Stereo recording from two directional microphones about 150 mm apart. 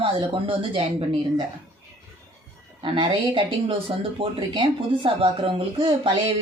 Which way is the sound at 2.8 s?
35° right (ahead or behind).